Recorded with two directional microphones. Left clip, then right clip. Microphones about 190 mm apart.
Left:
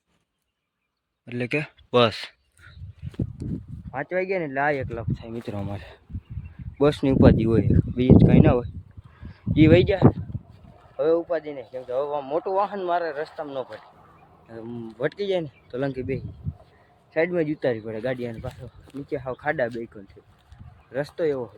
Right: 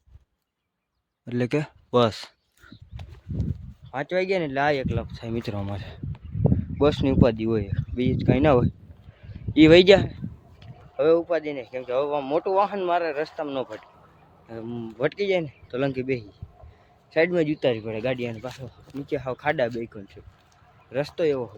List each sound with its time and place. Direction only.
1.2 s speech: 30° right (ahead or behind)
1.9 s a sound: 15° right (ahead or behind)
3.9 s speech: 10° right (ahead or behind); by 8.4 s 10° left (ahead or behind)
8.4 s speech: 10° right (ahead or behind)
10.9 s speech: 5° right (ahead or behind)
20.9 s speech: centre (ahead or behind)